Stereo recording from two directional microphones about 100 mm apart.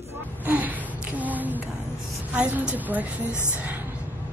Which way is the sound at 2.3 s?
10° right (ahead or behind).